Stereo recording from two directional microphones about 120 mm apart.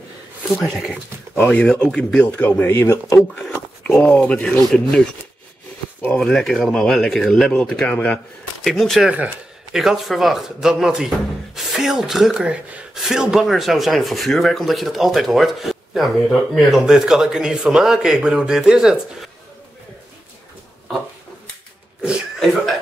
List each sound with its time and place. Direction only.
1.3 s speech: 15° left (ahead or behind)
3.3 s speech: 10° left (ahead or behind)
6.1 s speech: 5° left (ahead or behind)
22.4 s speech: centre (ahead or behind)